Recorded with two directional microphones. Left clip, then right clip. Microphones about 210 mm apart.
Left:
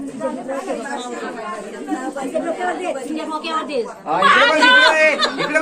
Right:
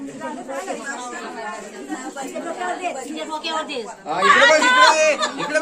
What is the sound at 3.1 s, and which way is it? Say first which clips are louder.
Speech: left 3 dB; 15° right (ahead or behind).